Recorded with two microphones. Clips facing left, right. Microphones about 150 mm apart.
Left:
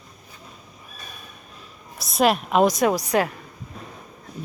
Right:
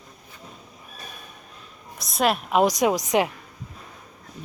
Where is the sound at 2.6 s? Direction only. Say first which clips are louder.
Left 1 dB; 15° right (ahead or behind).